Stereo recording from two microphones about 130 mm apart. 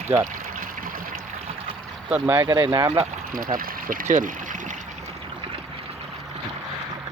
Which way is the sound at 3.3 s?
90° right.